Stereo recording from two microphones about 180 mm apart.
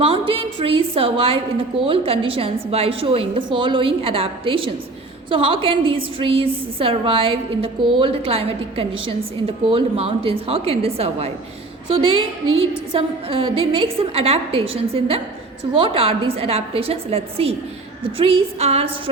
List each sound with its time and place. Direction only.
0.0 s a woman's voice: 30° right (ahead or behind)